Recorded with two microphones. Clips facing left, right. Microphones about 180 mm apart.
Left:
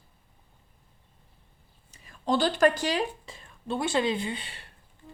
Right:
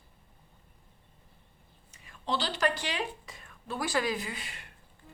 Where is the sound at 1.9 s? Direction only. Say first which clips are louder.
Left 7 dB; 40° left (ahead or behind).